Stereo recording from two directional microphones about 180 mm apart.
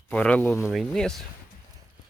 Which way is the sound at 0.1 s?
5° left (ahead or behind).